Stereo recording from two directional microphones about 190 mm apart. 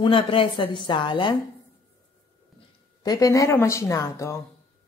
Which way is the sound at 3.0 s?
20° left (ahead or behind).